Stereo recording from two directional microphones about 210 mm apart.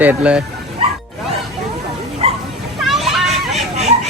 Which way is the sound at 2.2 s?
30° right (ahead or behind).